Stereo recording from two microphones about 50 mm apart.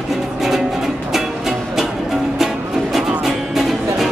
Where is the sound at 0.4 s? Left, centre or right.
Centre.